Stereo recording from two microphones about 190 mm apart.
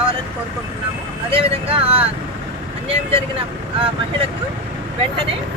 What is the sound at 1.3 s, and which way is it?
Speech, 30° right (ahead or behind).